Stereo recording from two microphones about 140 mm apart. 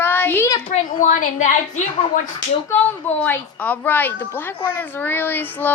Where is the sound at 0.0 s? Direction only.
15° left (ahead or behind).